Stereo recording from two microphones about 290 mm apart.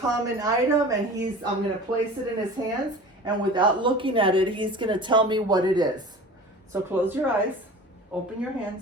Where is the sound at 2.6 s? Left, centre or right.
Centre.